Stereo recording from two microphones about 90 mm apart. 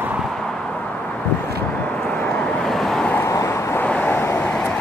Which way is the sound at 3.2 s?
35° left (ahead or behind).